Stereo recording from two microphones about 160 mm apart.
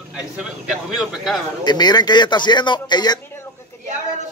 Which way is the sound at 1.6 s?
25° left (ahead or behind).